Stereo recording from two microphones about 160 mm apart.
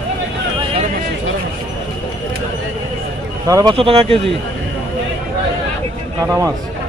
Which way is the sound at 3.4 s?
20° right (ahead or behind).